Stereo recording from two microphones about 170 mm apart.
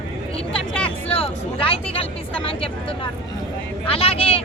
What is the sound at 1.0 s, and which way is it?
Speech, 30° left (ahead or behind).